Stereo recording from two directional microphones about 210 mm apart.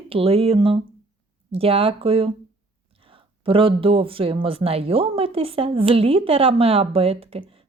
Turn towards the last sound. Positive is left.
turn(degrees=-25)  # may be behind; listen again after turning